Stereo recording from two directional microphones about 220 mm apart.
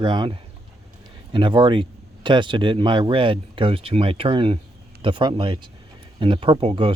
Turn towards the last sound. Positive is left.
turn(degrees=-25)  # may be behind; listen again after turning